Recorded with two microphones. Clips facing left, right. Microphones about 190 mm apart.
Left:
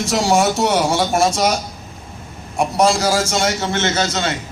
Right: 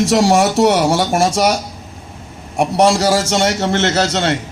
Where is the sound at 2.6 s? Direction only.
75° right (ahead or behind).